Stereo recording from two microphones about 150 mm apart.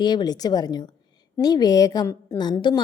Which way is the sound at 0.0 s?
30° left (ahead or behind).